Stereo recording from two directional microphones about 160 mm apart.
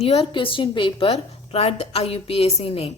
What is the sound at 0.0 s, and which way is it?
A woman's voice, 40° left (ahead or behind).